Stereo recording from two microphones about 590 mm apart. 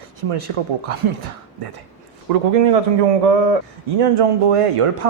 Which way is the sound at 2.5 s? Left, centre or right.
Right.